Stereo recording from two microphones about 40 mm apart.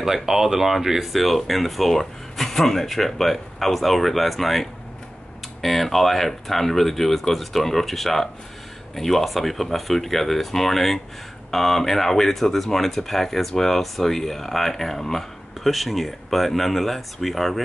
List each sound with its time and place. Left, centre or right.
0.0 s speech: centre